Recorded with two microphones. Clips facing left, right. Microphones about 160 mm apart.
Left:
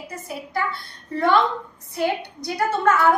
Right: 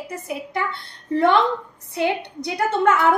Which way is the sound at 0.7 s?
25° right (ahead or behind).